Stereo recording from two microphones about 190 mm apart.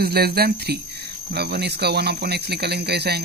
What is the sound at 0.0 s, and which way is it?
Speech, 55° right (ahead or behind).